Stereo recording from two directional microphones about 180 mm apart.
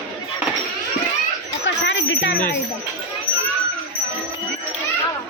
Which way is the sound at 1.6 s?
90° left.